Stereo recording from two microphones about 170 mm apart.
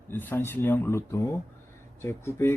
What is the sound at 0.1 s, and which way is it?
Speech, 10° left (ahead or behind).